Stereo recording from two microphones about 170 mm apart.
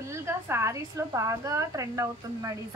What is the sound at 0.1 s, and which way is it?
A woman's voice, 15° right (ahead or behind).